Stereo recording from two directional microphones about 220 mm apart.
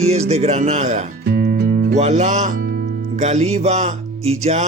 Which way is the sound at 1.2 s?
45° right (ahead or behind).